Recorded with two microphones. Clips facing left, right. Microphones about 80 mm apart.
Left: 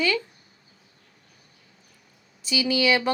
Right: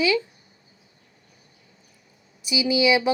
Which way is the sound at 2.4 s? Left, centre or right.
Centre.